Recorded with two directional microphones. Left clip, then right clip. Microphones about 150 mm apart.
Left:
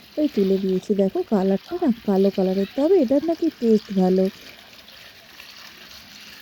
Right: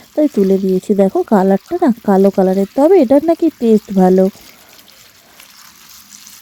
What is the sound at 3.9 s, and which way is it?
Speech, 55° right (ahead or behind).